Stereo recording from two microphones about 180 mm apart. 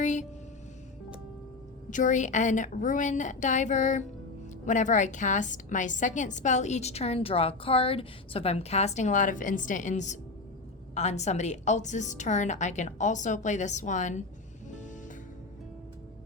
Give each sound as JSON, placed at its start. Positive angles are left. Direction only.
{"t": 0.0, "sound": "music", "side_deg": 40}
{"t": 1.9, "sound": "a woman's voice", "side_deg": 45}